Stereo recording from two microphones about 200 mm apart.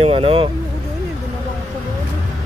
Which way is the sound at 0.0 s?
30° right (ahead or behind).